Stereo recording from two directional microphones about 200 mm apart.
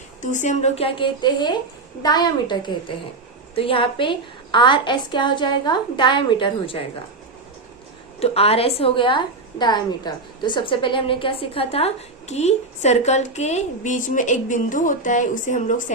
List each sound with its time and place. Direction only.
0.2 s a woman's voice: 35° left (ahead or behind)
8.2 s a woman's voice: 30° left (ahead or behind)